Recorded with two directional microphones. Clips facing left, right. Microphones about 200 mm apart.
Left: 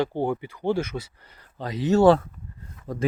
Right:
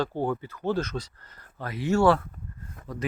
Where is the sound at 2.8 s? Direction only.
50° right (ahead or behind).